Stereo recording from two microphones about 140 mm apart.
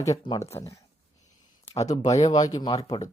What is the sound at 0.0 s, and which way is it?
Speech, 25° left (ahead or behind).